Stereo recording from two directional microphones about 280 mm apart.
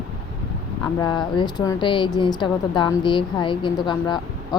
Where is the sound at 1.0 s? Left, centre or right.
Centre.